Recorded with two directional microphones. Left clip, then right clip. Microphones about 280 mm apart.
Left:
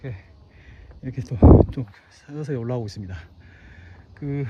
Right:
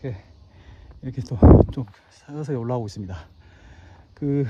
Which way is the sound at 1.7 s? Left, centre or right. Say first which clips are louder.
Even; centre.